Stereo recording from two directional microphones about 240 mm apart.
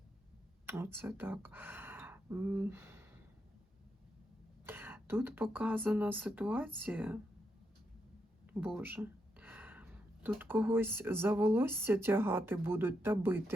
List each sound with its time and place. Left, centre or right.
0.7 s speech: centre
4.6 s speech: centre
8.6 s speech: centre